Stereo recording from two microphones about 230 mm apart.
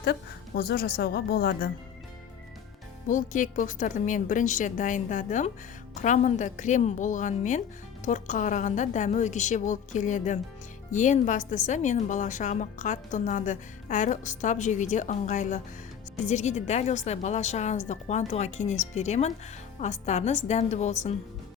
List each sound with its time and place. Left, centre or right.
0.0 s a woman's voice: left
3.1 s a woman's voice: left